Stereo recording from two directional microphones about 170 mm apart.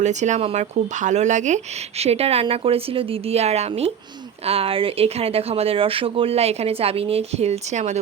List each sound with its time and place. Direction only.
0.0 s speech: 45° right (ahead or behind)